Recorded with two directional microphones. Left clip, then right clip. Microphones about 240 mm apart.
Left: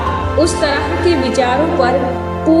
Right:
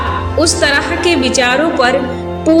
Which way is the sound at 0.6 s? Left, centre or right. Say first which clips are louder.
Right 2 dB; right.